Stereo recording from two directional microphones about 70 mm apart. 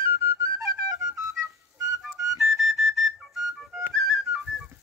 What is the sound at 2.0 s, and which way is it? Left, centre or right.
Flute, centre.